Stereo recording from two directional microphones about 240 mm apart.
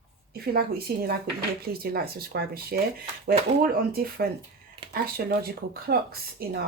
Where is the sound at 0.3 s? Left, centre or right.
Right.